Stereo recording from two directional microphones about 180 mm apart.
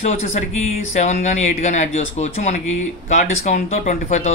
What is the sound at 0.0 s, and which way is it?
Speech, 40° left (ahead or behind).